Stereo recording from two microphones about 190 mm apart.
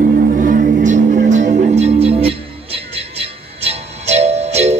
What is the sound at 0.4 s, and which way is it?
Music, 45° right (ahead or behind).